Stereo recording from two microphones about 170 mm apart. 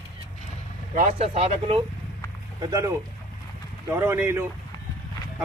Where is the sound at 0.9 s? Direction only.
45° right (ahead or behind).